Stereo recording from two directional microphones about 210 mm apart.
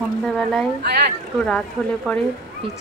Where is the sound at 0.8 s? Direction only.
50° right (ahead or behind).